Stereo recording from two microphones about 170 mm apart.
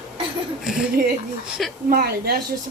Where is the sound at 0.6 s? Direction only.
5° right (ahead or behind).